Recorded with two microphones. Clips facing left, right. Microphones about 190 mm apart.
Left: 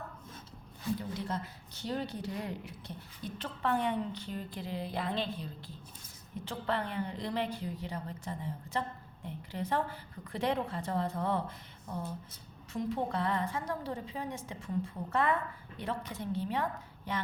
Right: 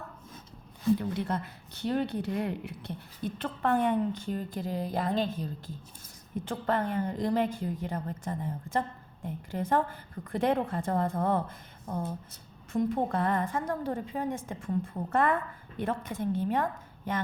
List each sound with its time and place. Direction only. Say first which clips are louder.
0.9 s speech: right 6 dB; 60° right (ahead or behind)